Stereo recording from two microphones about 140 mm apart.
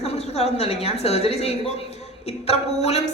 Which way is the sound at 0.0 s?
50° left (ahead or behind).